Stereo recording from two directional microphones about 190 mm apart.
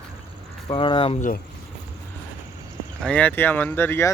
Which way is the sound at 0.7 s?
25° left (ahead or behind).